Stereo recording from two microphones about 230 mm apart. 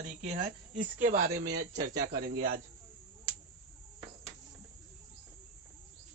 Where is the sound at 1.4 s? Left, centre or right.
Right.